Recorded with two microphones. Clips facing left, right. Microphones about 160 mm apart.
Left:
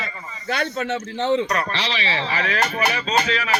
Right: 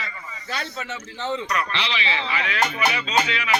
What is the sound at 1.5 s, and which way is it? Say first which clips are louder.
Speech: left 2 dB; 40° left (ahead or behind).